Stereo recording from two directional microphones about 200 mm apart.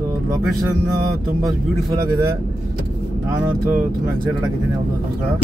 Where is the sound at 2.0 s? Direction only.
15° right (ahead or behind).